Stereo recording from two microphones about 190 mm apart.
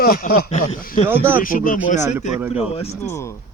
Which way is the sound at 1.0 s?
10° right (ahead or behind).